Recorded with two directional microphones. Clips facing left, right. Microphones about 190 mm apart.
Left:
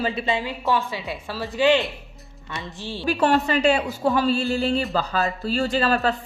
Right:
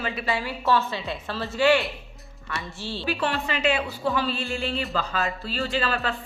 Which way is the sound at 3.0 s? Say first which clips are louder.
Left 7 dB; 45° left (ahead or behind).